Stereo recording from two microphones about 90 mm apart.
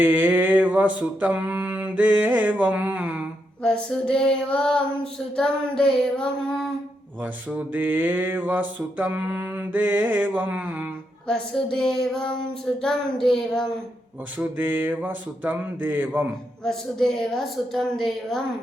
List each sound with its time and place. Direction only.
0.0 s mantra: 20° right (ahead or behind)
3.6 s child singing: 10° left (ahead or behind)
7.2 s mantra: 20° right (ahead or behind)
11.3 s child singing: 5° left (ahead or behind)
12.8 s a woman's voice: 5° left (ahead or behind)
14.3 s mantra: 20° right (ahead or behind)
16.6 s a woman's voice: 5° left (ahead or behind)